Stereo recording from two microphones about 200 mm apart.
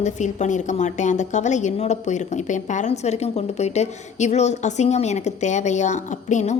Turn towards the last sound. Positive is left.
turn(degrees=35)  # may be behind; listen again after turning